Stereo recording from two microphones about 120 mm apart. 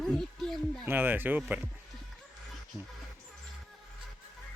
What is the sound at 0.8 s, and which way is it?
Speech, 15° right (ahead or behind).